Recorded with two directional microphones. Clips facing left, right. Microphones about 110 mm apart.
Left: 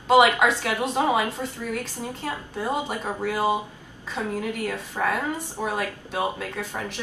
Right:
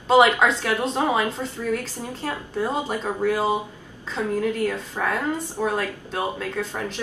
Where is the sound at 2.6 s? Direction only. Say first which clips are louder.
Right 1 dB; 10° left (ahead or behind).